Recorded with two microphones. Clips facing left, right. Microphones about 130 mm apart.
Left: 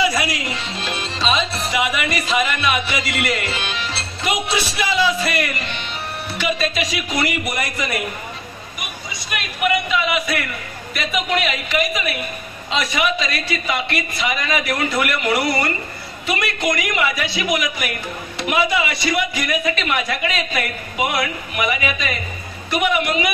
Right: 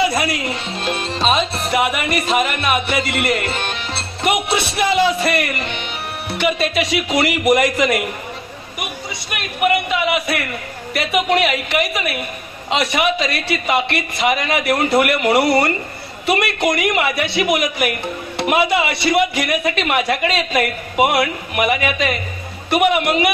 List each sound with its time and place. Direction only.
0.0 s music: 50° right (ahead or behind)
6.3 s speech: 65° right (ahead or behind); by 8.0 s 80° right
9.3 s music: 55° right (ahead or behind)
10.9 s speech: 65° right (ahead or behind)
12.6 s music: 65° right (ahead or behind)
19.1 s speech: 65° right (ahead or behind)
19.8 s music: 60° right (ahead or behind)